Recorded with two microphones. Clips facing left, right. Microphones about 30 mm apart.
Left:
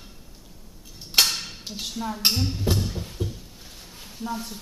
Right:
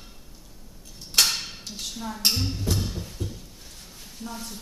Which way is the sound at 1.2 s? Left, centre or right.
Centre.